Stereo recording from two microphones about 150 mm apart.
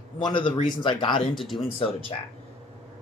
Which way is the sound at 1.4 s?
Centre (ahead or behind).